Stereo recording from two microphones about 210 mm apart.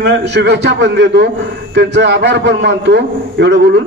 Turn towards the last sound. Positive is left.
turn(degrees=-55)  # may be behind; listen again after turning